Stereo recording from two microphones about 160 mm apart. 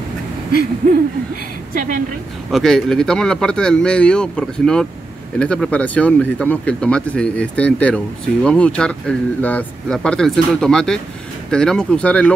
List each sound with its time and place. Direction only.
1.7 s a woman's voice: 55° right (ahead or behind)
2.5 s speech: 5° left (ahead or behind)